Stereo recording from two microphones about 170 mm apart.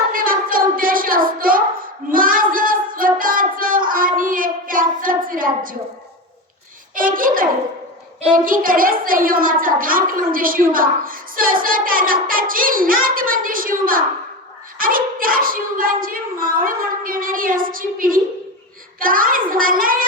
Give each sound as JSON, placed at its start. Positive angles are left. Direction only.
{"t": 0.1, "sound": "a sound", "side_deg": -55}
{"t": 2.0, "sound": "child singing", "side_deg": -55}
{"t": 6.9, "sound": "a child's voice", "side_deg": -55}
{"t": 8.4, "sound": "speech", "side_deg": -55}